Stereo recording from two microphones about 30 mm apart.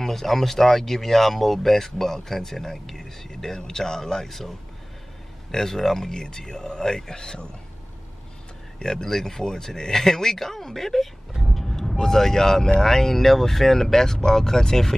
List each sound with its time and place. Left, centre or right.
0.0 s speech: centre
8.8 s speech: centre
11.5 s vehicle: centre
12.0 s speech: centre